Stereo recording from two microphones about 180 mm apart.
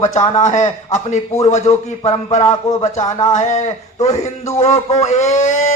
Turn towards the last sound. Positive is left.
turn(degrees=40)  # may be behind; listen again after turning